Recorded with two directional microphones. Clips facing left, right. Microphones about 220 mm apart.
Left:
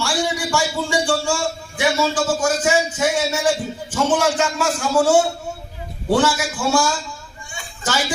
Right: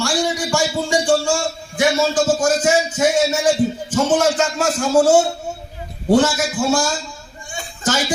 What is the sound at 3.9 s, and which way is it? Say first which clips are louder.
Music: left 1 dB; 45° right (ahead or behind).